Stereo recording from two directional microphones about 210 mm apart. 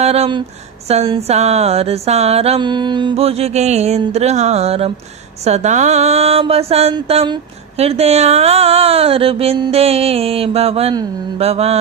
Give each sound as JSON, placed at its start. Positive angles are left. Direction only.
{"t": 0.0, "sound": "speech", "side_deg": -30}
{"t": 0.9, "sound": "music", "side_deg": -30}
{"t": 5.5, "sound": "speech", "side_deg": -35}